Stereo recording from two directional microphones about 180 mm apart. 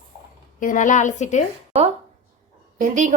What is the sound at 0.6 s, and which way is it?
Speech, 45° left (ahead or behind).